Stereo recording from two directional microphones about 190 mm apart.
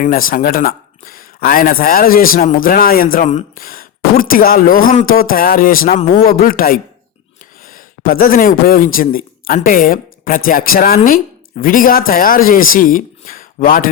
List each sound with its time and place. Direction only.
0.0 s speech: 45° left (ahead or behind)